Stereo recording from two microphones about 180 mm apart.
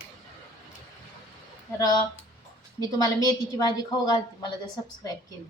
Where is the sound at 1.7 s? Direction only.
20° left (ahead or behind).